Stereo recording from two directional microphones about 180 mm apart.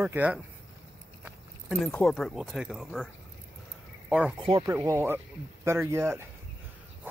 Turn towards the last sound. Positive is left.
turn(degrees=-15)  # may be behind; listen again after turning